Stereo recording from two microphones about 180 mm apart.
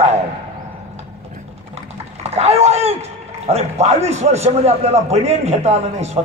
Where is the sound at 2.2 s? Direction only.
35° right (ahead or behind).